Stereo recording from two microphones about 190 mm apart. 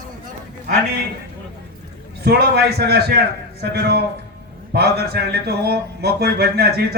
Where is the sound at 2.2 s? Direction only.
60° right (ahead or behind).